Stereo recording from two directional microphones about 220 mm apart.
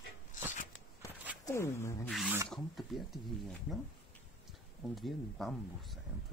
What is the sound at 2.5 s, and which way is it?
Speech, centre (ahead or behind).